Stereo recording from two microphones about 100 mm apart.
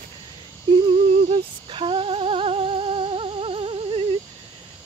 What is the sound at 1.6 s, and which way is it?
Humming, 60° right (ahead or behind).